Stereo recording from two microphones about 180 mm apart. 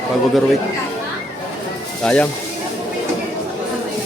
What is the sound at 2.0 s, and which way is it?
Speech, 5° left (ahead or behind).